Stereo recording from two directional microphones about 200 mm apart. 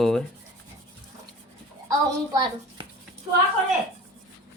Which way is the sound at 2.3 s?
20° right (ahead or behind).